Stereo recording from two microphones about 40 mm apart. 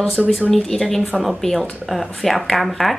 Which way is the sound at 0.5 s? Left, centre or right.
Centre.